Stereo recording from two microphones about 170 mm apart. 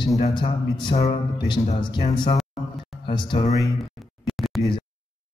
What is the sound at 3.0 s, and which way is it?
Speech, 30° left (ahead or behind).